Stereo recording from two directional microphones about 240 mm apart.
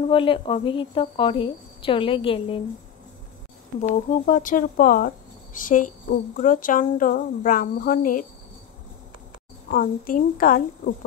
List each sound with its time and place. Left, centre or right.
0.1 s a woman's voice: left
4.1 s speech: left
9.7 s speech: left